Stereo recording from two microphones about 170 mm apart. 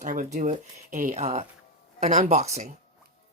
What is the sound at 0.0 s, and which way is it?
Speech, 50° right (ahead or behind).